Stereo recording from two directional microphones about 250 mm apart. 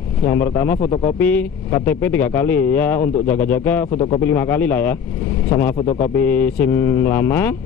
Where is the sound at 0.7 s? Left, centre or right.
Left.